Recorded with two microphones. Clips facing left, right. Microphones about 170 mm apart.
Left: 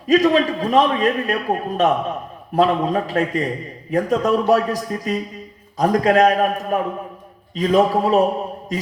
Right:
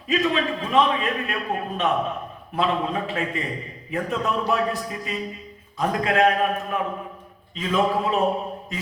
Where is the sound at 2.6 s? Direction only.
40° left (ahead or behind).